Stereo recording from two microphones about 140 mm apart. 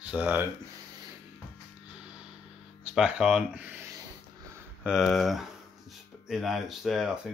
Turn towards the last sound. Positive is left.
turn(degrees=-5)  # may be behind; listen again after turning